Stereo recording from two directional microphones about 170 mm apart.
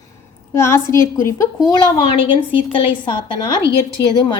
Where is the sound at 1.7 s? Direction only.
30° left (ahead or behind).